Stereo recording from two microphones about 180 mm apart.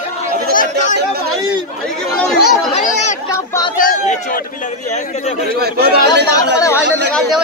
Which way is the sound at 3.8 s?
45° left (ahead or behind).